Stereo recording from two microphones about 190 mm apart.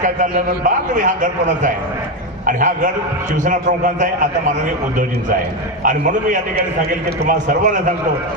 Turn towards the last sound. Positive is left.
turn(degrees=-40)  # may be behind; listen again after turning